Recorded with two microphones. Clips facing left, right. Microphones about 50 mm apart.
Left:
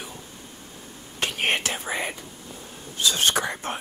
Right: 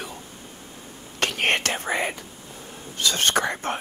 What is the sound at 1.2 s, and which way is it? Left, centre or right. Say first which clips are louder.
Whispering: right 2 dB; right.